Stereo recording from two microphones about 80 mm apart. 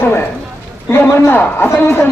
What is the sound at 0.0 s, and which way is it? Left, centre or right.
A man's voice, left.